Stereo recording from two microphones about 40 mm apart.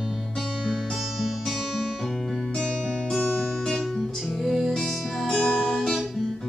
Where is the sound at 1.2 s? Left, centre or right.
Centre.